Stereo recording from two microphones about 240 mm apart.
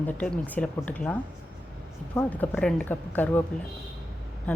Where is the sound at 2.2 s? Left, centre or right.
Centre.